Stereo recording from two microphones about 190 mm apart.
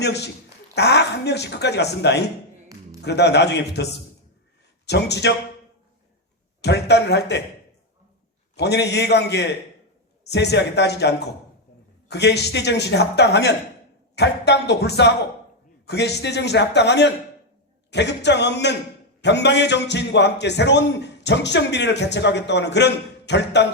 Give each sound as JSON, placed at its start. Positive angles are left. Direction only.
{"t": 0.0, "sound": "a man's voice", "side_deg": 60}
{"t": 4.9, "sound": "a man's voice", "side_deg": 60}
{"t": 6.6, "sound": "a man's voice", "side_deg": 60}
{"t": 8.5, "sound": "a man's voice", "side_deg": 60}